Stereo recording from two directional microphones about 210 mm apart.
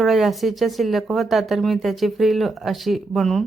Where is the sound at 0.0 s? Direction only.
Centre (ahead or behind).